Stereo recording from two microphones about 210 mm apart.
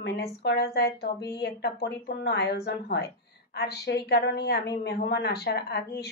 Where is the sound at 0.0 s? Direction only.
50° left (ahead or behind).